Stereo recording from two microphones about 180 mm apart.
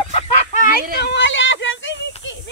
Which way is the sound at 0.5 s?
45° left (ahead or behind).